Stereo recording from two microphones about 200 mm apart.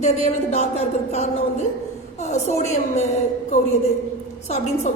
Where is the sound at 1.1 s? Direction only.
30° left (ahead or behind).